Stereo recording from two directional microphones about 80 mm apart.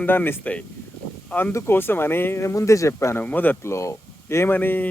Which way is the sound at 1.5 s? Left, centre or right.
Left.